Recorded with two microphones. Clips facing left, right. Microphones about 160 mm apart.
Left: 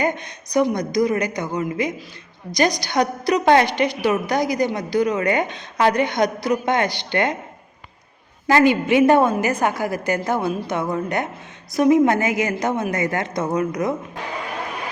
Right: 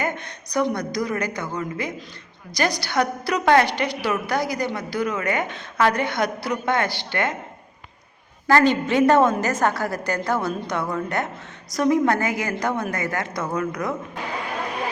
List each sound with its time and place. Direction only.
0.0 s a woman's voice: 15° left (ahead or behind)
8.4 s a woman's voice: 15° left (ahead or behind)